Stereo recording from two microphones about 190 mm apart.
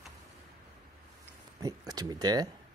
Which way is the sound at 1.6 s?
20° right (ahead or behind).